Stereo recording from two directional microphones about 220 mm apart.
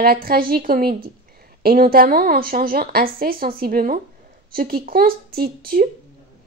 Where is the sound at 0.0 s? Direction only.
45° right (ahead or behind).